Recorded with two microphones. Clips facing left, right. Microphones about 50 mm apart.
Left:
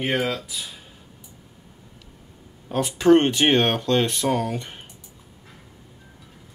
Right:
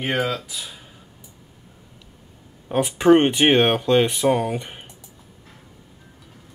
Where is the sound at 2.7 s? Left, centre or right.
Centre.